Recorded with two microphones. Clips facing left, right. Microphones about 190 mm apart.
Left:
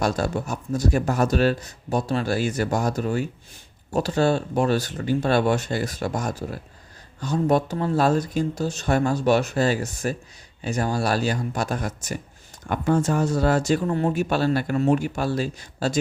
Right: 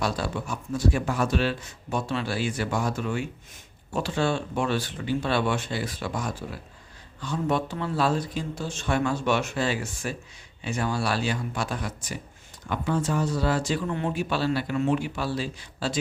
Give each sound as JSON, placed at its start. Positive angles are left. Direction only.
{"t": 0.0, "sound": "speech", "side_deg": 45}